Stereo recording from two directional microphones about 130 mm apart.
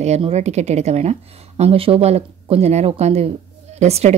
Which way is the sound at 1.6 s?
45° right (ahead or behind).